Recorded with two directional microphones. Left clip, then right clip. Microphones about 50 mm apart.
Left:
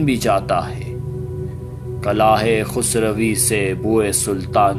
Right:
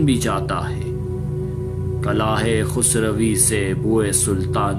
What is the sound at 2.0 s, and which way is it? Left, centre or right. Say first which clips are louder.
Speech: left 6 dB; left.